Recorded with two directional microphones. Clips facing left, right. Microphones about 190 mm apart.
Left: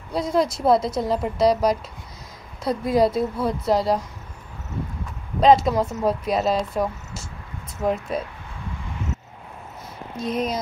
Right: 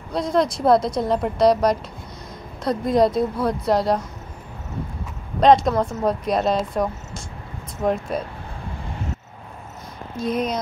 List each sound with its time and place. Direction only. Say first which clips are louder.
0.1 s a woman's voice: right 1 dB; 5° left (ahead or behind)
5.4 s a woman's voice: right 1 dB; 5° left (ahead or behind)
10.1 s a woman's voice: right 2 dB; centre (ahead or behind)